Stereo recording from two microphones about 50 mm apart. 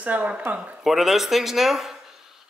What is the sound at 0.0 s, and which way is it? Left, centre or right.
Speech, right.